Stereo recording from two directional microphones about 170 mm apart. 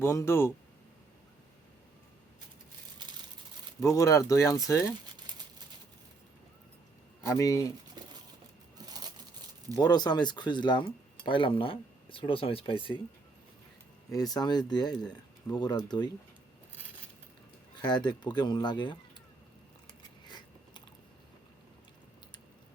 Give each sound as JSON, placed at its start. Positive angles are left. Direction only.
{"t": 0.0, "sound": "speech", "side_deg": 15}
{"t": 3.8, "sound": "speech", "side_deg": 20}
{"t": 7.3, "sound": "speech", "side_deg": 20}
{"t": 8.0, "sound": "a sound", "side_deg": -25}
{"t": 8.9, "sound": "crushing", "side_deg": -25}
{"t": 9.7, "sound": "speech", "side_deg": 20}
{"t": 14.3, "sound": "speech", "side_deg": 25}
{"t": 17.7, "sound": "speech", "side_deg": 25}
{"t": 20.0, "sound": "biting", "side_deg": 25}